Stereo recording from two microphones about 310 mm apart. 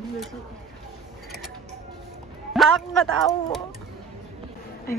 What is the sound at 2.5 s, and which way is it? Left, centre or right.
Speech, centre.